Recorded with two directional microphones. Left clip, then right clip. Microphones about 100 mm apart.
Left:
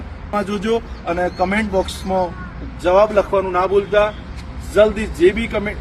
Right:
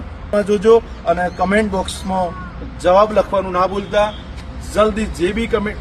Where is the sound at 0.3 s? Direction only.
40° right (ahead or behind).